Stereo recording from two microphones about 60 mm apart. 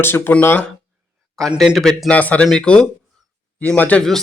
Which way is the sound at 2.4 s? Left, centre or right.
Centre.